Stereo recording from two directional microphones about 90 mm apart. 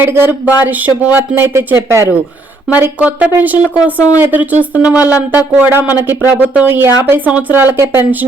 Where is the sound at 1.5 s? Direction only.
30° right (ahead or behind).